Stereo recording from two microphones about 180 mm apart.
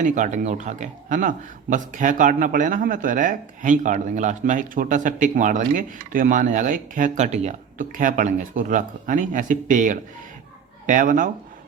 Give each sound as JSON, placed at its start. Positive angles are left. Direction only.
{"t": 0.0, "sound": "speech", "side_deg": -45}